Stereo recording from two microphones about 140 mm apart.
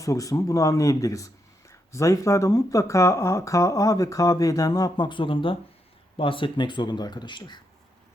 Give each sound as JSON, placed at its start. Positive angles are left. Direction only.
{"t": 0.0, "sound": "speech", "side_deg": 25}